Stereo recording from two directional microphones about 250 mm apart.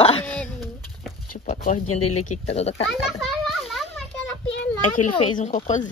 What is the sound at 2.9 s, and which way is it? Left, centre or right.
Children playing, centre.